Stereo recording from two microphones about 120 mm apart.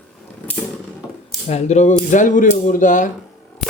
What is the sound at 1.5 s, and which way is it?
Speech, 70° left (ahead or behind).